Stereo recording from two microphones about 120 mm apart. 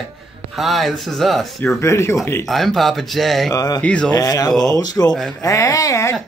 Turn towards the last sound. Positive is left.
turn(degrees=25)  # may be behind; listen again after turning